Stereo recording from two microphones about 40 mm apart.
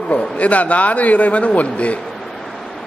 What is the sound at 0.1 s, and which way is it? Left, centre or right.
A man's voice, left.